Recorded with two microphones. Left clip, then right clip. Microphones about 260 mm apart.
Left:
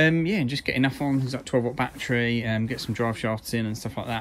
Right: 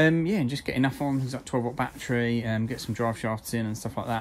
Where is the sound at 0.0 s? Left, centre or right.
Centre.